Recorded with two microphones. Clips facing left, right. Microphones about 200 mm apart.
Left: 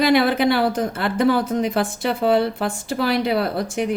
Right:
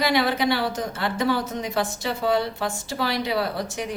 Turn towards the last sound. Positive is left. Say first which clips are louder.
# left 5 dB
turn(degrees=55)  # may be behind; listen again after turning